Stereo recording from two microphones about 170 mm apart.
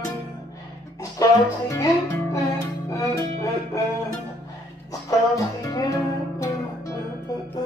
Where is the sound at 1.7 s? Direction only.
20° left (ahead or behind).